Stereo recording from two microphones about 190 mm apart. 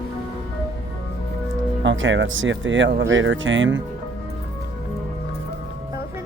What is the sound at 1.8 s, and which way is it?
Speech, 75° right (ahead or behind).